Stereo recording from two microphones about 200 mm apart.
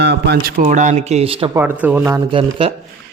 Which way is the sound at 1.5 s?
10° right (ahead or behind).